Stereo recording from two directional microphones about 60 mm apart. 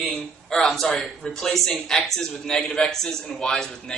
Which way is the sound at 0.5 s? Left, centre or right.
Centre.